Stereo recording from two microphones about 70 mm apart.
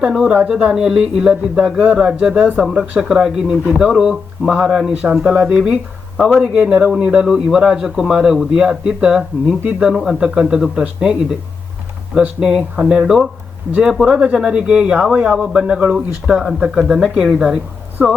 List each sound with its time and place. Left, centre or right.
0.0 s a man's voice: centre
12.4 s a man's voice: centre